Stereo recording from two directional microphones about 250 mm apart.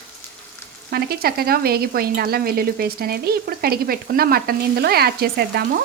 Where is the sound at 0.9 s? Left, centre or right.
Right.